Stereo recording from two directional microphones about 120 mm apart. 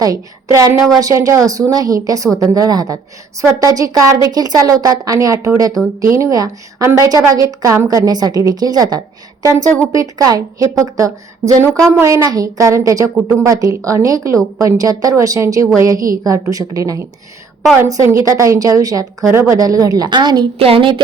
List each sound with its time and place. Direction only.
0.5 s a woman's voice: 25° right (ahead or behind)
20.6 s a woman's voice: 50° right (ahead or behind)